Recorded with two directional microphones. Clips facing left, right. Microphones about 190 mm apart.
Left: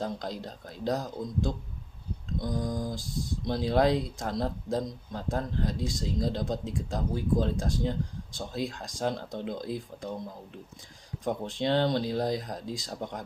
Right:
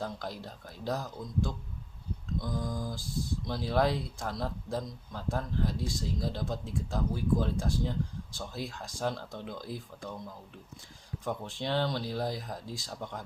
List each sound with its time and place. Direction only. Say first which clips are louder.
0.0 s speech: left 4 dB; 20° left (ahead or behind)